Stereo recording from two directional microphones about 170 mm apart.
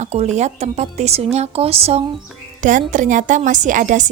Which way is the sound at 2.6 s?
50° right (ahead or behind).